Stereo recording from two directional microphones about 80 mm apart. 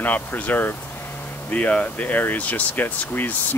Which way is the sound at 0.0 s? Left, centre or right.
Left.